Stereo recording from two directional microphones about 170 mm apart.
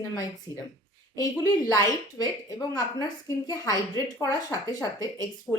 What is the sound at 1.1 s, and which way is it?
A woman's voice, 20° left (ahead or behind).